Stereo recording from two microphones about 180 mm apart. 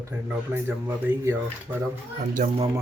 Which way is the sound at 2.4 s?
40° right (ahead or behind).